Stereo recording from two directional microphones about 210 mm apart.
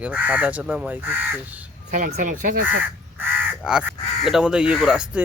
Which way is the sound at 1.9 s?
35° right (ahead or behind).